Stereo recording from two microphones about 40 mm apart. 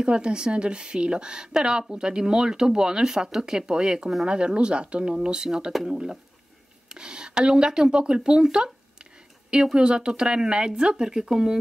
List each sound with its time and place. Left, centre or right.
0.0 s a woman's voice: right
9.8 s a woman's voice: right